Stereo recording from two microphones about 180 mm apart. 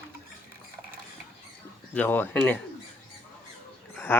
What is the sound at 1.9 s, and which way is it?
Speech, 10° left (ahead or behind).